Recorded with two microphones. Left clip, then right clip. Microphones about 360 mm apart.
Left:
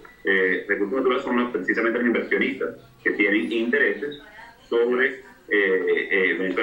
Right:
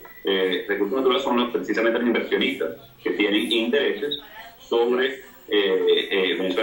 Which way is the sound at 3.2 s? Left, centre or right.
Centre.